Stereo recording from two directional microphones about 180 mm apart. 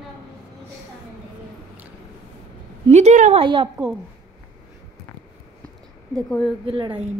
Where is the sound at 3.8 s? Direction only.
15° right (ahead or behind).